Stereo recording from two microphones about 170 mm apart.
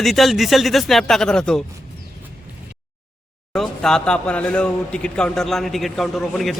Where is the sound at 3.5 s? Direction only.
5° left (ahead or behind).